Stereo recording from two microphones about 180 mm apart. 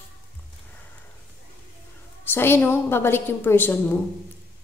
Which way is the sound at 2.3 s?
10° left (ahead or behind).